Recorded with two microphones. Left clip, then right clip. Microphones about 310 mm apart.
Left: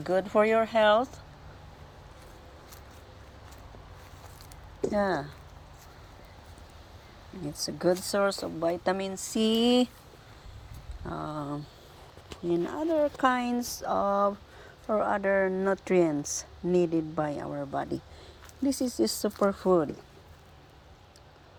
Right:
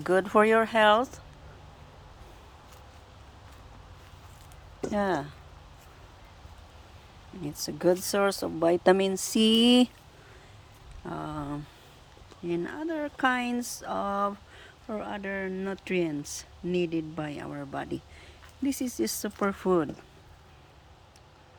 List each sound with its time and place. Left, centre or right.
0.0 s speech: centre
7.4 s speech: centre
11.0 s speech: right
12.5 s speech: centre